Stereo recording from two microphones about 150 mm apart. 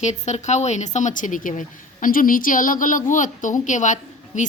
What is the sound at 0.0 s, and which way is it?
A woman's voice, 50° left (ahead or behind).